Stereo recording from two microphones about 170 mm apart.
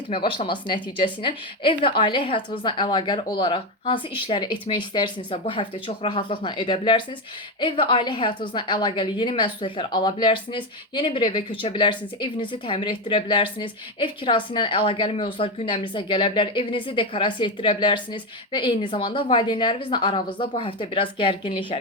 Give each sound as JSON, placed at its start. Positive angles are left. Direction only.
{"t": 0.3, "sound": "a woman's voice", "side_deg": 30}